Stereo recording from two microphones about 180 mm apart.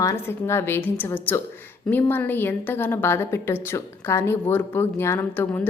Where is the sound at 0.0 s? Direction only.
15° left (ahead or behind).